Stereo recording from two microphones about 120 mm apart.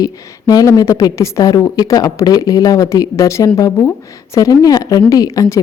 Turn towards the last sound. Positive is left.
turn(degrees=25)  # may be behind; listen again after turning